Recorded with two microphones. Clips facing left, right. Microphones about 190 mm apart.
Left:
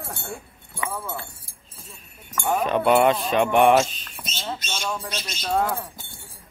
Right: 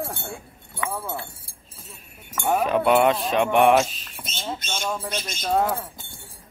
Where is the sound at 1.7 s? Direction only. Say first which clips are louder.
Even; centre (ahead or behind).